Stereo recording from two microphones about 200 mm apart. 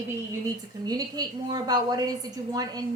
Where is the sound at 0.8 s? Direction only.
20° right (ahead or behind).